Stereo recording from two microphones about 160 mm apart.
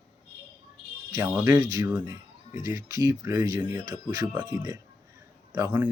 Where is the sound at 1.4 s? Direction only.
25° right (ahead or behind).